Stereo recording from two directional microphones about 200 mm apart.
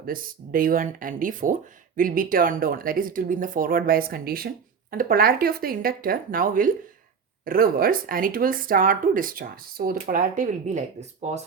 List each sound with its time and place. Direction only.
0.0 s speech: 45° right (ahead or behind)